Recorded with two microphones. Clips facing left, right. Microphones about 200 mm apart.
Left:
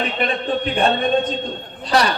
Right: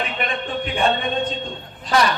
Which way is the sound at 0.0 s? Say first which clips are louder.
Left 4 dB; 35° left (ahead or behind).